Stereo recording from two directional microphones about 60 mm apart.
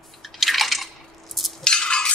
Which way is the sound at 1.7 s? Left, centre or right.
Centre.